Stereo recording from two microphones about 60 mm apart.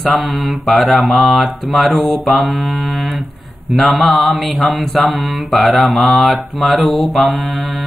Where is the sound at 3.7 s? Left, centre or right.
Centre.